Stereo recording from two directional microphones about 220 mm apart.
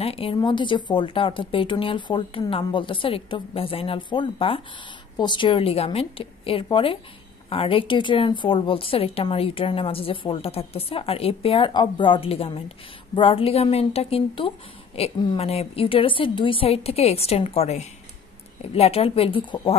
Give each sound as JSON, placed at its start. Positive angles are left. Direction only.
{"t": 0.0, "sound": "a woman's voice", "side_deg": 25}